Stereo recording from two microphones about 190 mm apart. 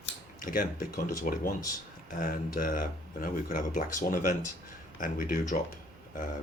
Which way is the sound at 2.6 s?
50° left (ahead or behind).